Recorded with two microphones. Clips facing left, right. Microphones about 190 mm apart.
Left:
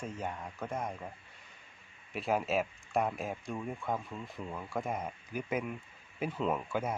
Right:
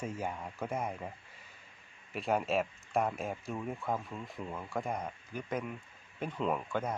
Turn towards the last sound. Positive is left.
turn(degrees=5)  # may be behind; listen again after turning